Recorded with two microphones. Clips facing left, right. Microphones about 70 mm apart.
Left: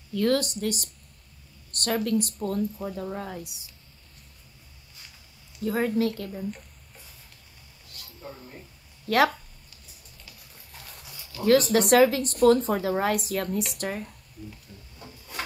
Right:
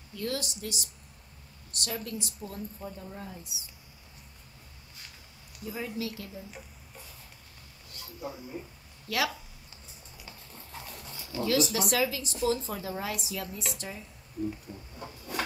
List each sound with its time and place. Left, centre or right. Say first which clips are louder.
0.1 s speech: left 10 dB; left
5.6 s speech: left 11 dB; left
9.0 s speech: left 9 dB; left
10.2 s music: right 4 dB; right
11.1 s a sound: right 5 dB; right
11.4 s speech: left 8 dB; left
14.5 s a sound: right 6 dB; right